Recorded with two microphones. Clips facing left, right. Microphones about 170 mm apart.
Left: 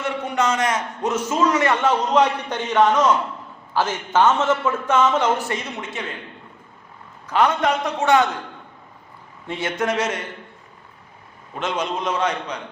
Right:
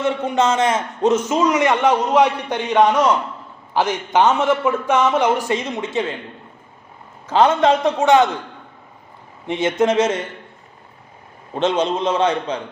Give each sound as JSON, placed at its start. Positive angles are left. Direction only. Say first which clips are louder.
{"t": 0.0, "sound": "a man's voice", "louder": "right 4 dB", "side_deg": -25}
{"t": 7.3, "sound": "a man's voice", "louder": "right 5 dB", "side_deg": -25}
{"t": 9.5, "sound": "a man's voice", "louder": "right 6 dB", "side_deg": -20}
{"t": 11.5, "sound": "a man's voice", "louder": "right 6 dB", "side_deg": -30}